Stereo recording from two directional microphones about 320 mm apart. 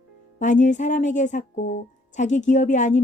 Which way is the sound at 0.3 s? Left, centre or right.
Left.